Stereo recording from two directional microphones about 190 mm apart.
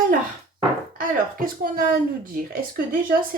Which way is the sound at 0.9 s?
50° right (ahead or behind).